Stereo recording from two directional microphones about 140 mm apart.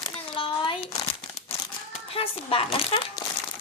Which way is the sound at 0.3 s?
40° left (ahead or behind).